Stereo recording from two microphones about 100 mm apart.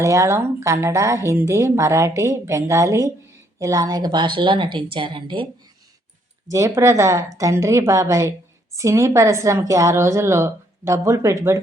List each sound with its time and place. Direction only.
0.0 s a woman's voice: 30° right (ahead or behind); by 5.5 s 55° right (ahead or behind)
6.5 s a woman's voice: 30° right (ahead or behind)